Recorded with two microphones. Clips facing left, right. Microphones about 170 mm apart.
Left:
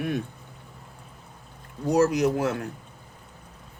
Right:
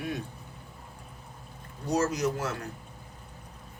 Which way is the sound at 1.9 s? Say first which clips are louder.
Left 6 dB; 55° left (ahead or behind).